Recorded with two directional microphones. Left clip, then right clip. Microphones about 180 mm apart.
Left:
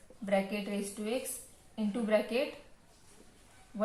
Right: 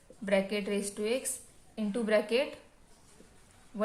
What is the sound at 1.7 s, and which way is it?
Speech, 50° right (ahead or behind).